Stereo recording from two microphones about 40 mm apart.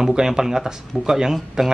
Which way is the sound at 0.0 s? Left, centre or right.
Centre.